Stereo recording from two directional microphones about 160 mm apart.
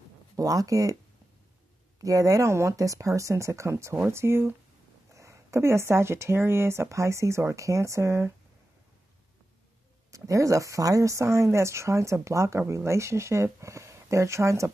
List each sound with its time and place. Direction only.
0.4 s speech: 20° right (ahead or behind)
2.0 s speech: 20° right (ahead or behind)
10.1 s speech: 20° right (ahead or behind)